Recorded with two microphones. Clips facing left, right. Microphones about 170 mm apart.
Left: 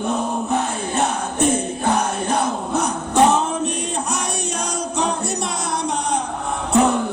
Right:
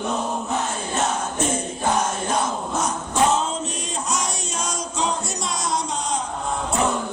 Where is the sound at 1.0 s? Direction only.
60° left (ahead or behind).